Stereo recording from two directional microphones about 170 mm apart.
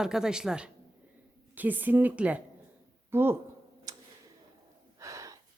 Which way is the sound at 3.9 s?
20° right (ahead or behind).